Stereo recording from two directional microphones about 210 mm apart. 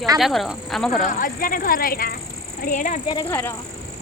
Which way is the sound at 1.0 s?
40° left (ahead or behind).